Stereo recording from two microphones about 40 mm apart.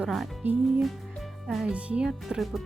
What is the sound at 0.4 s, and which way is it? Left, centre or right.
Speech, right.